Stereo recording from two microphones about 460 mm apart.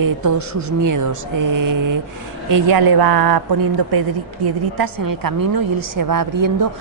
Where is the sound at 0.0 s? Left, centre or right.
Right.